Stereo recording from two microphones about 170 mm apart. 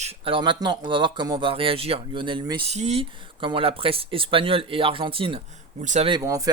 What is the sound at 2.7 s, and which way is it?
Speech, 40° right (ahead or behind).